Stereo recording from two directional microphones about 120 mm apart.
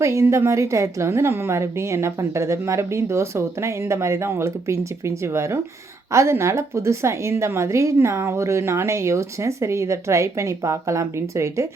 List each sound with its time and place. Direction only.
0.0 s a woman's voice: 25° right (ahead or behind)